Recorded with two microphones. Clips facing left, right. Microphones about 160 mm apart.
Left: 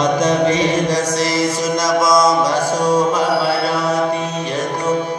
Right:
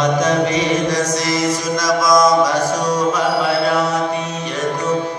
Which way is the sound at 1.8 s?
25° left (ahead or behind).